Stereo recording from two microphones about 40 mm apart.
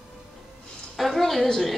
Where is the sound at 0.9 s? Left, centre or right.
Centre.